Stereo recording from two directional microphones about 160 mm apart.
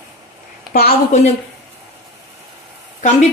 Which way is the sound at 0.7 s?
70° left (ahead or behind).